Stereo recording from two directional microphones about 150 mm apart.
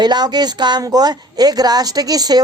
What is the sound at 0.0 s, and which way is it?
Speech, 30° right (ahead or behind).